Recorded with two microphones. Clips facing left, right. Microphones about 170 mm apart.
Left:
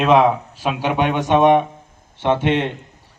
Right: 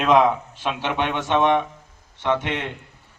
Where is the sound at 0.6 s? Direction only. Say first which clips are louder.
Left 5 dB; 10° left (ahead or behind).